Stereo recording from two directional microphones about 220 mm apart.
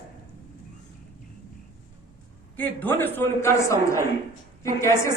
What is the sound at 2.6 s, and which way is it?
A woman's voice, 10° left (ahead or behind).